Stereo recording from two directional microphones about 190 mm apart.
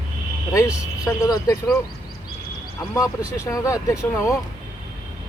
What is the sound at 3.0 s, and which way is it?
Speech, 15° left (ahead or behind).